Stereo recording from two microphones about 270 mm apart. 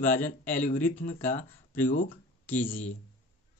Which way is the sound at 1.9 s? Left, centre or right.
Left.